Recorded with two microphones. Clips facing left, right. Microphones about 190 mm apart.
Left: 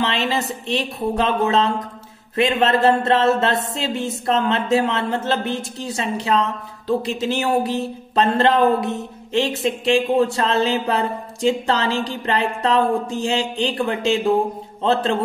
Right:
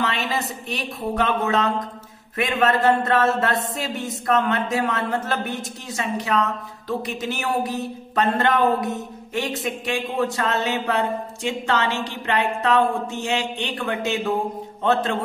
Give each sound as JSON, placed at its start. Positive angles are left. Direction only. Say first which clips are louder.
{"t": 0.0, "sound": "music", "louder": "left 3 dB", "side_deg": 30}